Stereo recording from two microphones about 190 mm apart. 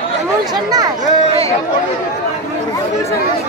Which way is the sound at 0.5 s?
20° right (ahead or behind).